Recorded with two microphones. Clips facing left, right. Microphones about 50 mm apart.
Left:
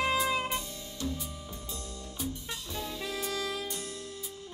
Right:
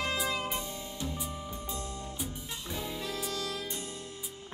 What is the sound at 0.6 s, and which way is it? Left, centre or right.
Music, centre.